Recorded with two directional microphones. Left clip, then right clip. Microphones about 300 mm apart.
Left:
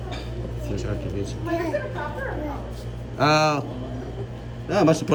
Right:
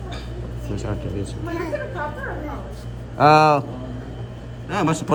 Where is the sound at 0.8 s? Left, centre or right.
Centre.